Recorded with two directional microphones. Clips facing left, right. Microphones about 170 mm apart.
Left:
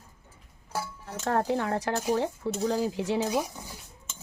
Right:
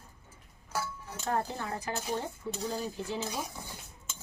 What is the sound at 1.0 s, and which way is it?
Cutlery, 75° left (ahead or behind).